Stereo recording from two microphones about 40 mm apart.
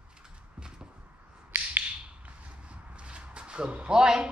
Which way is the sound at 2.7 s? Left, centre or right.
Right.